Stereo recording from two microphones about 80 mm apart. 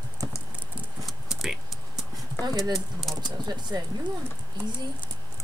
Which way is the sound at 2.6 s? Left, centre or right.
Centre.